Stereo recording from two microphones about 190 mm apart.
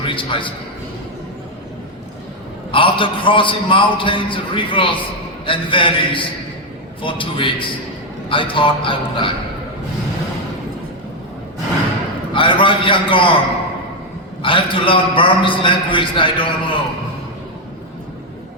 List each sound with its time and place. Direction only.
0.0 s a man's voice: 25° left (ahead or behind)
2.7 s a man's voice: 25° left (ahead or behind)
12.3 s a man's voice: 25° left (ahead or behind)
14.4 s a man's voice: 25° left (ahead or behind)